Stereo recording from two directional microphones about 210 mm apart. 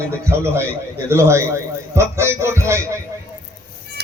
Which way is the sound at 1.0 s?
15° right (ahead or behind).